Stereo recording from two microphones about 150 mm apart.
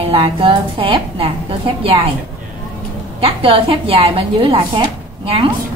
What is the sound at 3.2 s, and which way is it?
A woman's voice, 40° right (ahead or behind).